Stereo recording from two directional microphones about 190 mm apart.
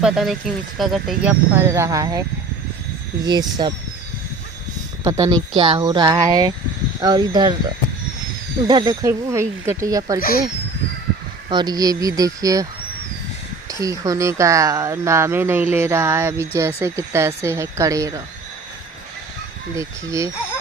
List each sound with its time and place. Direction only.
0.0 s speech: centre (ahead or behind); by 2.2 s 20° right (ahead or behind)
3.2 s speech: 20° right (ahead or behind)
5.0 s speech: 15° right (ahead or behind)
8.6 s speech: 25° right (ahead or behind)
10.2 s speech: 50° left (ahead or behind)
11.4 s speech: 25° right (ahead or behind)
13.7 s speech: 15° right (ahead or behind)
19.7 s speech: 15° right (ahead or behind)